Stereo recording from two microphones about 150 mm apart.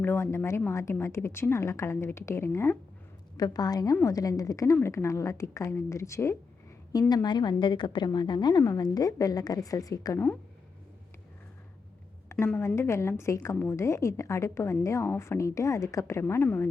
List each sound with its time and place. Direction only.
0.0 s a woman's voice: 15° left (ahead or behind)
12.3 s a woman's voice: 15° left (ahead or behind)